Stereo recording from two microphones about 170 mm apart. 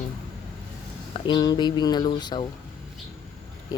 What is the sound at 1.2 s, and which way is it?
Speech, 25° left (ahead or behind).